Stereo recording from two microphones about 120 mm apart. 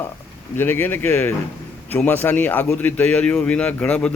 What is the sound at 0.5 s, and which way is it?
A man's voice, 15° left (ahead or behind).